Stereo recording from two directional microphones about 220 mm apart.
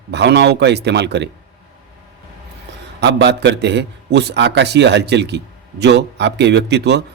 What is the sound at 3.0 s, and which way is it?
A man's voice, 50° right (ahead or behind).